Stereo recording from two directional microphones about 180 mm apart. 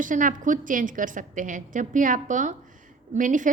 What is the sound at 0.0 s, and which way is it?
A woman's voice, 45° right (ahead or behind).